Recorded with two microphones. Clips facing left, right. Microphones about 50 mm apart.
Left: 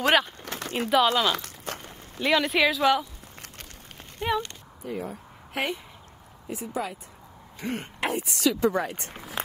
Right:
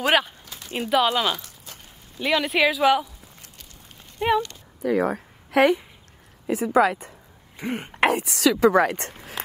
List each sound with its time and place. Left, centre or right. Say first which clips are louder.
0.0 s speech: right 1 dB; centre
0.4 s a sound: left 6 dB; left
0.7 s speech: right 1 dB; centre
1.3 s a sound: left 2 dB; left
2.2 s speech: right 1 dB; centre
4.3 s speech: right 6 dB; centre
4.8 s speech: right 11 dB; right
6.4 s speech: right 12 dB; right
7.5 s speech: right 3 dB; centre
8.0 s speech: right 6 dB; right